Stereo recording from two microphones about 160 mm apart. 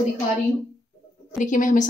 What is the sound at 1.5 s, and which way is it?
Speech, 55° left (ahead or behind).